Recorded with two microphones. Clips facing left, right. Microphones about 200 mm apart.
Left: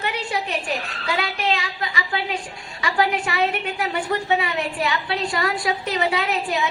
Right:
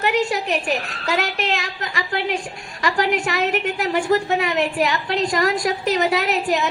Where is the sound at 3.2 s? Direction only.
45° right (ahead or behind).